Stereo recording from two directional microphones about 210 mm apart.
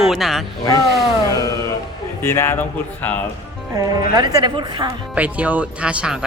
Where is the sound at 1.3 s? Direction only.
15° left (ahead or behind).